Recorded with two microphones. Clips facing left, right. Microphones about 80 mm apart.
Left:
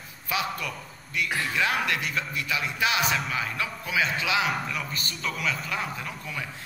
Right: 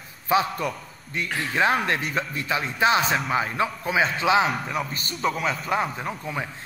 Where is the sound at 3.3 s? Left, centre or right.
Right.